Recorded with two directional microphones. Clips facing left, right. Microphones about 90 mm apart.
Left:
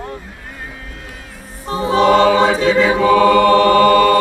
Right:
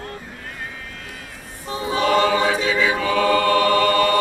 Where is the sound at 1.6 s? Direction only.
40° left (ahead or behind).